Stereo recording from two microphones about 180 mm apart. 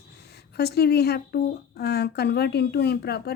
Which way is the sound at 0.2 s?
65° left (ahead or behind).